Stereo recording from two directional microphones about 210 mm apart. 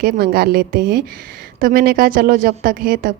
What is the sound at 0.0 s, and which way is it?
A woman's voice, 45° right (ahead or behind).